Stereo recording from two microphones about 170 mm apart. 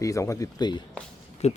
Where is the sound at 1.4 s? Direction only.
40° left (ahead or behind).